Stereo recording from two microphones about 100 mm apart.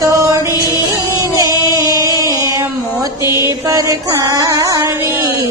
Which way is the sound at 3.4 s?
35° right (ahead or behind).